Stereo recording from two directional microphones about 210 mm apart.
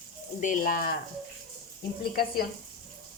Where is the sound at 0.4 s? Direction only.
40° left (ahead or behind).